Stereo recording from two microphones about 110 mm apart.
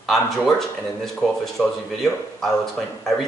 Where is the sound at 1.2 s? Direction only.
Centre (ahead or behind).